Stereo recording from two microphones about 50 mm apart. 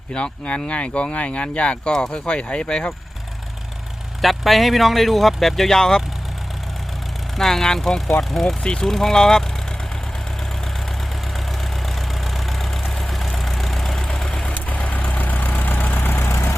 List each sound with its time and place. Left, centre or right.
0.1 s speech: left
4.2 s speech: centre
7.3 s speech: centre
8.6 s speech: centre
8.9 s speech: centre
11.9 s vehicle: centre
14.4 s vehicle: left
16.3 s vehicle: left